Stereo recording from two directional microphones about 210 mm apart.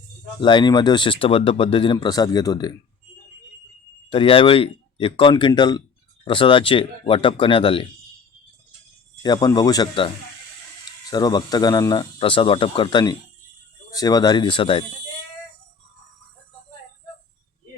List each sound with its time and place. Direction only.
0.4 s speech: 20° left (ahead or behind)
4.1 s speech: 25° left (ahead or behind)
9.2 s speech: 20° left (ahead or behind)
11.1 s speech: 20° left (ahead or behind)